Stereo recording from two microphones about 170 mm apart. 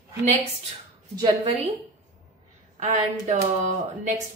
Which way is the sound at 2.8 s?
40° right (ahead or behind).